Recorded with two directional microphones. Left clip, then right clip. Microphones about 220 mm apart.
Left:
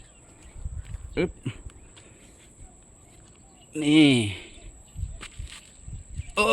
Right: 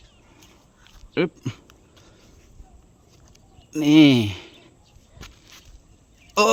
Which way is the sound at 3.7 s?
30° right (ahead or behind).